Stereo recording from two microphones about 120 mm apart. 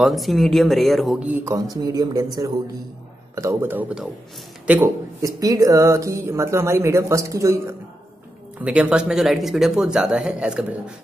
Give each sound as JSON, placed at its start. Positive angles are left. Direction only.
{"t": 0.0, "sound": "speech", "side_deg": 0}
{"t": 1.4, "sound": "speech", "side_deg": -30}
{"t": 3.7, "sound": "speech", "side_deg": -5}
{"t": 4.8, "sound": "speech", "side_deg": -30}
{"t": 8.5, "sound": "speech", "side_deg": -10}